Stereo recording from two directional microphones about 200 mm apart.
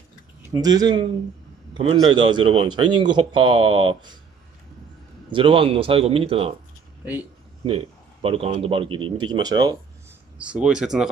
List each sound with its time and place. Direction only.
0.4 s a man's voice: 15° right (ahead or behind)
5.3 s a man's voice: 25° right (ahead or behind)
7.6 s a man's voice: 30° right (ahead or behind)
10.3 s speech: 5° right (ahead or behind)